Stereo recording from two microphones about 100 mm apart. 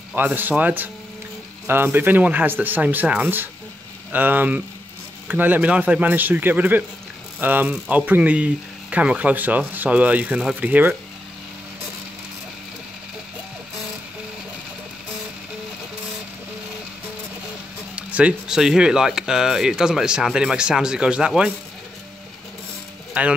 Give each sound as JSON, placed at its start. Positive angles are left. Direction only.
{"t": 0.1, "sound": "speech", "side_deg": -20}
{"t": 17.9, "sound": "speech", "side_deg": -10}
{"t": 23.2, "sound": "speech", "side_deg": -15}